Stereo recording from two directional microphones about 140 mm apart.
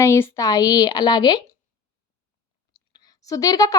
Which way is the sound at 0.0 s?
20° left (ahead or behind).